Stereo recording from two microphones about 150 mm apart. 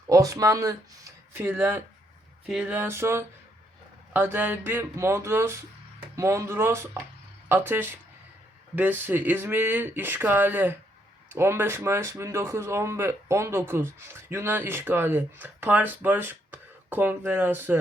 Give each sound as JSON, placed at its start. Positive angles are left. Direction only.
{"t": 0.1, "sound": "speech", "side_deg": -20}